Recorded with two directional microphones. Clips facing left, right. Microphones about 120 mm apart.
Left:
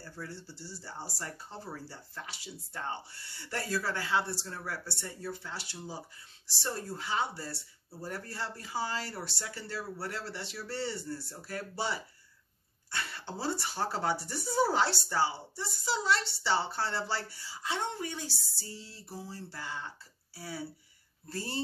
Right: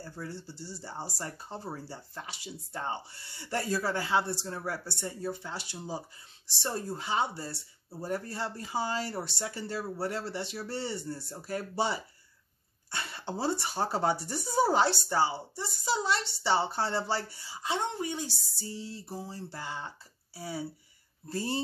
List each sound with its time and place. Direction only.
0.0 s speech: 25° right (ahead or behind)